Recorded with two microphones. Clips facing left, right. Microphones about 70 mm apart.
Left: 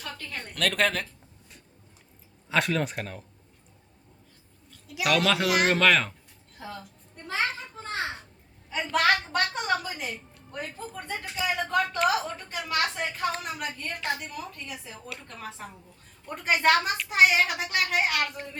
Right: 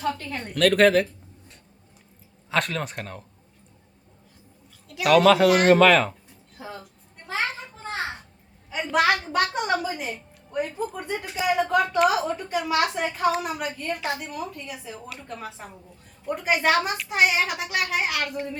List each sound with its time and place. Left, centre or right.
0.0 s a woman's voice: right
0.5 s speech: centre
2.5 s speech: centre
4.9 s speech: centre
6.6 s music: centre
8.9 s a woman's voice: centre
9.6 s a sound: centre
10.5 s a woman's voice: centre